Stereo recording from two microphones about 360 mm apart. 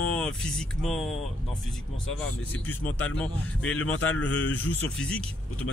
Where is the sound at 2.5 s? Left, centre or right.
Centre.